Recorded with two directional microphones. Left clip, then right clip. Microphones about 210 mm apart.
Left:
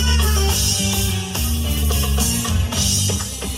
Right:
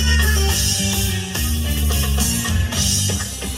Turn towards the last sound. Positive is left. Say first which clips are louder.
# even
turn(degrees=0)  # may be behind; listen again after turning